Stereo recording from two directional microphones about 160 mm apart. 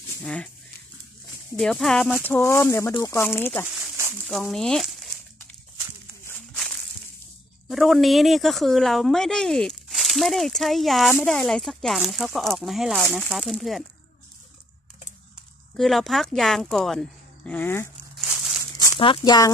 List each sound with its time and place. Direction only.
0.2 s speech: 5° left (ahead or behind)
1.6 s speech: 5° left (ahead or behind)
3.8 s a sound: 15° right (ahead or behind)
4.3 s speech: centre (ahead or behind)
6.2 s a sound: 10° left (ahead or behind)
7.6 s speech: centre (ahead or behind)
15.7 s speech: centre (ahead or behind)
18.1 s crumpling: centre (ahead or behind)
18.8 s speech: 30° left (ahead or behind)